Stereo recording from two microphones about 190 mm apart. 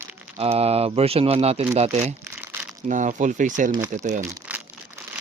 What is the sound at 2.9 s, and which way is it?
Speech, 40° right (ahead or behind).